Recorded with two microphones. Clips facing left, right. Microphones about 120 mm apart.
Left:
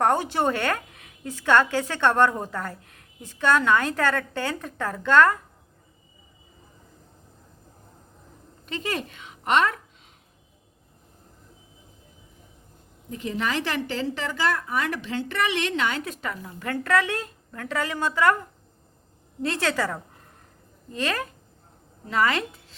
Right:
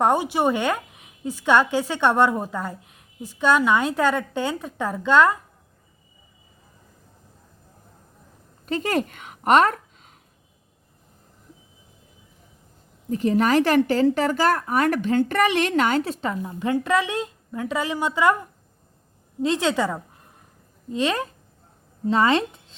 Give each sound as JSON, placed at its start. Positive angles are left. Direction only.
{"t": 0.0, "sound": "a woman's voice", "side_deg": -15}
{"t": 8.6, "sound": "a woman's voice", "side_deg": -40}
{"t": 13.1, "sound": "a woman's voice", "side_deg": -40}